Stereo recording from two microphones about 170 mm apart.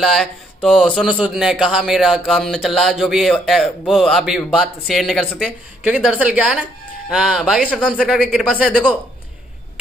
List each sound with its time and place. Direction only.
0.0 s speech: centre (ahead or behind)